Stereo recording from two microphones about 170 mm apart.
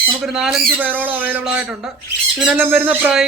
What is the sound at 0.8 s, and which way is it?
Speech, 10° right (ahead or behind).